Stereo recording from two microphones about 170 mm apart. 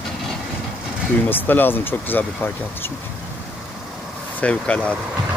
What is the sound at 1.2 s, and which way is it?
A man's voice, 10° left (ahead or behind).